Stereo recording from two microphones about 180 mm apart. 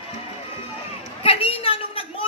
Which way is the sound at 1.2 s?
30° left (ahead or behind).